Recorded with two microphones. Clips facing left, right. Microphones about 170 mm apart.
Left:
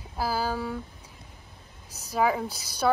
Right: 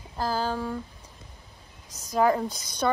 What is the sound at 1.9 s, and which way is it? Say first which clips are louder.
Speech: right 3 dB; 10° left (ahead or behind).